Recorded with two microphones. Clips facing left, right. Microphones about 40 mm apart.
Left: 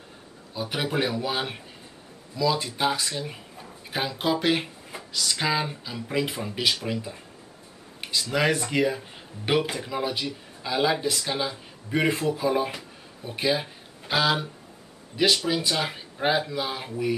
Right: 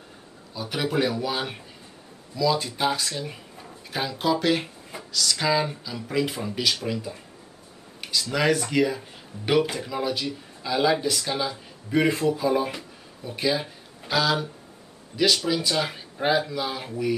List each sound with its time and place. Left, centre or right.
0.6 s speech: centre
3.9 s speech: centre
8.0 s speech: centre